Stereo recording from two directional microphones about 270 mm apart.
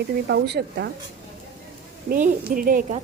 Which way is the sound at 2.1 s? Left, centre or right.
Right.